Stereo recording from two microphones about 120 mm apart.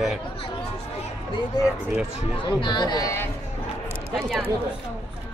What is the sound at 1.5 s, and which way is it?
Speech, 35° left (ahead or behind).